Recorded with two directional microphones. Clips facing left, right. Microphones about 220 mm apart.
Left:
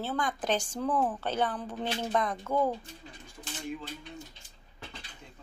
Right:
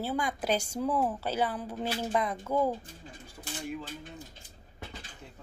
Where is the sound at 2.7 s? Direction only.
50° right (ahead or behind).